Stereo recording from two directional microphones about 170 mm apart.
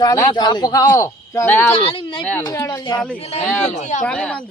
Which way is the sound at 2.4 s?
20° left (ahead or behind).